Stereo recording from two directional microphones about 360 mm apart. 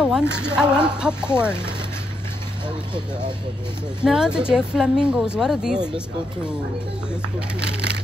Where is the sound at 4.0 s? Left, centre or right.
Centre.